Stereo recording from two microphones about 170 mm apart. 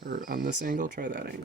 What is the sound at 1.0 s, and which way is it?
Speech, 55° right (ahead or behind).